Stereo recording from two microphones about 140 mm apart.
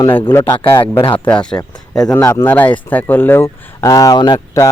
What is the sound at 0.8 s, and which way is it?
Speech, 40° left (ahead or behind).